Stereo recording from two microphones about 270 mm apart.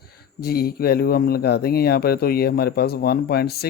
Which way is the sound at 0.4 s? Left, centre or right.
Left.